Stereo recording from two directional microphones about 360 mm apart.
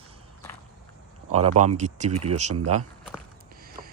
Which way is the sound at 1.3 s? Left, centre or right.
Right.